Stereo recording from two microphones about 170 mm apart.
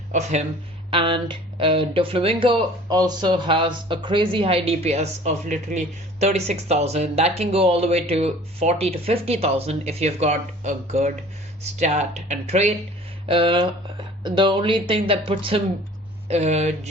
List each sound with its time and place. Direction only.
0.1 s speech: 45° right (ahead or behind)
0.9 s speech: 30° right (ahead or behind)